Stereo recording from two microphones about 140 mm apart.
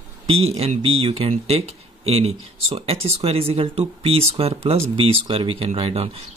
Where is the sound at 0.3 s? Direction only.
45° right (ahead or behind).